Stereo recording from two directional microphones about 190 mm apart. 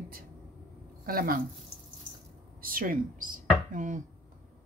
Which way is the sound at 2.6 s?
45° right (ahead or behind).